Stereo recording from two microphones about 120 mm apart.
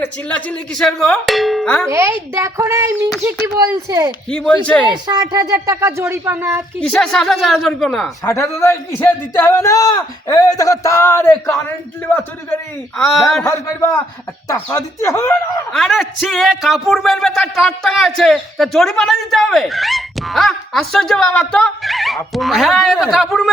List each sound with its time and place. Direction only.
0.0 s speech: 10° left (ahead or behind)
1.9 s speech: 20° right (ahead or behind)
4.3 s a man's voice: 10° left (ahead or behind)
4.9 s speech: 35° right (ahead or behind)
5.6 s speech: 25° right (ahead or behind)
6.7 s speech: 5° left (ahead or behind)
8.2 s a man's voice: 25° left (ahead or behind)
13.0 s speech: centre (ahead or behind)
14.4 s a man's voice: 25° left (ahead or behind)
15.7 s speech: centre (ahead or behind)